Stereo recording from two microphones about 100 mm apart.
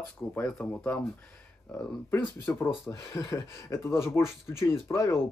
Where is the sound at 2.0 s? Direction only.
20° left (ahead or behind).